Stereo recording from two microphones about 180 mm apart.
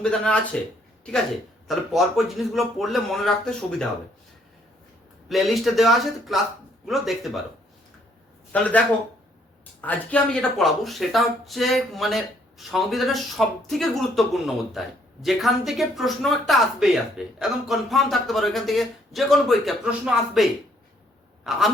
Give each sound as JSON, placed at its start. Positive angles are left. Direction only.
{"t": 0.0, "sound": "speech", "side_deg": 5}
{"t": 1.6, "sound": "speech", "side_deg": 0}
{"t": 5.3, "sound": "speech", "side_deg": 0}
{"t": 8.5, "sound": "speech", "side_deg": 5}
{"t": 9.8, "sound": "speech", "side_deg": 10}